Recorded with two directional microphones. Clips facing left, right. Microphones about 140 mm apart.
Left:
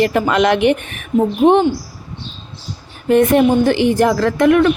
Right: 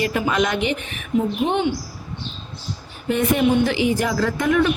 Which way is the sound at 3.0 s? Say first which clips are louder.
Left 7 dB; 55° left (ahead or behind).